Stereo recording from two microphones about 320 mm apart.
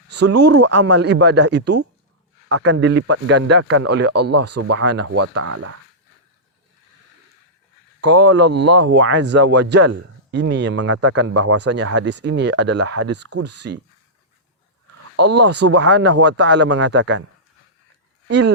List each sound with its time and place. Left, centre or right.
0.1 s speech: right
5.1 s speech: right
8.0 s speech: right
13.5 s speech: right
15.1 s speech: right
15.5 s speech: right
15.9 s speech: right
18.3 s speech: right